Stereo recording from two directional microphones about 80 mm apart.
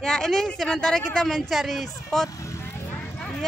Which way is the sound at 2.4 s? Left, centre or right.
Left.